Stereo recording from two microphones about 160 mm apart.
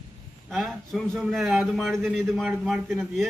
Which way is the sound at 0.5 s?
Centre (ahead or behind).